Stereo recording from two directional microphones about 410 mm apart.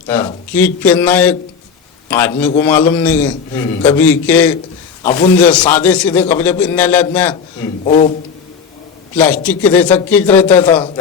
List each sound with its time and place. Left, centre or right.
0.1 s a man's voice: centre
7.9 s a man's voice: centre
9.1 s a man's voice: centre